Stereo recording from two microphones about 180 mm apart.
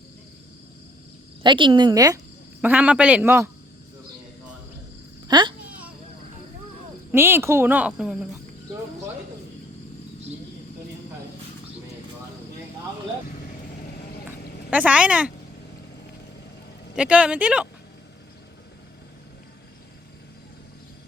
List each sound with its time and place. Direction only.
1.4 s a woman's voice: 25° right (ahead or behind)
2.6 s speech: 10° right (ahead or behind)
5.3 s a sound: 25° right (ahead or behind)
7.1 s speech: 10° right (ahead or behind)
14.3 s a sound: 10° right (ahead or behind)
16.9 s speech: 5° right (ahead or behind)